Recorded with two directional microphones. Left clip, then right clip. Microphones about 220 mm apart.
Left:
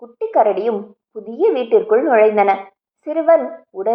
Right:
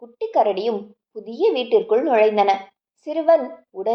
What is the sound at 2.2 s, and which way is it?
A woman's voice, 20° left (ahead or behind).